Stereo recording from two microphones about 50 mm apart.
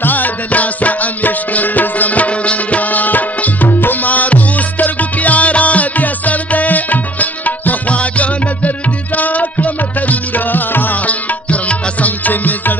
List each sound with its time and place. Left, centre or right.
0.0 s music: left